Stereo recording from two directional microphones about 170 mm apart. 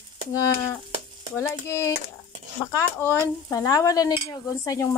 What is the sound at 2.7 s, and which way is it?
Speech, 15° left (ahead or behind).